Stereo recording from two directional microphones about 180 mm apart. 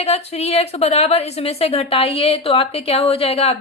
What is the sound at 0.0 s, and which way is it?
Speech, 35° left (ahead or behind).